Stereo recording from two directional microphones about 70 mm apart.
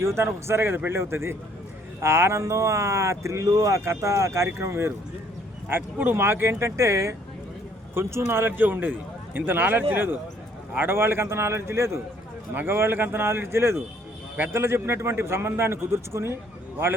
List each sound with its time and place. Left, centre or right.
0.0 s a man's voice: right
5.6 s a man's voice: right